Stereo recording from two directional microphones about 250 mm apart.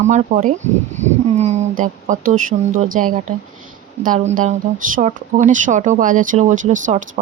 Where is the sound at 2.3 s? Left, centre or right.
Right.